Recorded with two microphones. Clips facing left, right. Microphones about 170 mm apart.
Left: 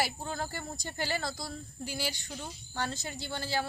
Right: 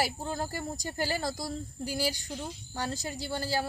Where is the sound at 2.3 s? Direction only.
10° right (ahead or behind).